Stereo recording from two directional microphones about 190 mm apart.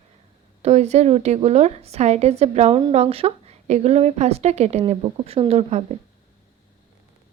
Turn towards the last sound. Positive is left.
turn(degrees=-35)  # may be behind; listen again after turning